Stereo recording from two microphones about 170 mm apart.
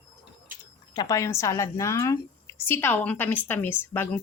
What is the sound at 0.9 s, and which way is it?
A woman's voice, 20° left (ahead or behind).